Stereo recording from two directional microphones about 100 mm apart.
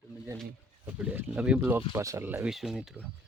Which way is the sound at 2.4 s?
5° right (ahead or behind).